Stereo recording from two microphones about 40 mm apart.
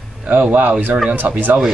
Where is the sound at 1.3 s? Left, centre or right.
Right.